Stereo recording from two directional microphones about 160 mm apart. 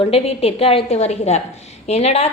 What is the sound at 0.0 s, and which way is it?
A woman's voice, 40° left (ahead or behind).